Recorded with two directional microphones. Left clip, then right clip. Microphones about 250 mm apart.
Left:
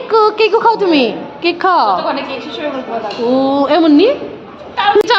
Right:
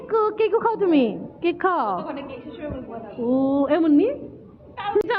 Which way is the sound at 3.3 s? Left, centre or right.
Centre.